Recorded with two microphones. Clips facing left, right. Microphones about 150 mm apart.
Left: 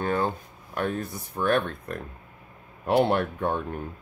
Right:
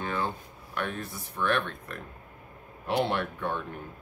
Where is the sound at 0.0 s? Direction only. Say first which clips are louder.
Left 6 dB; 45° left (ahead or behind).